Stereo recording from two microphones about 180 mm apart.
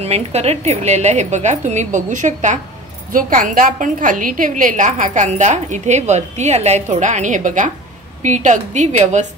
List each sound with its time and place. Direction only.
0.0 s a woman's voice: 35° right (ahead or behind)